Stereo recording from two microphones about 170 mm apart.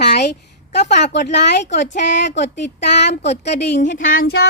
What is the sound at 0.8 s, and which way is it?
Speech, 45° left (ahead or behind).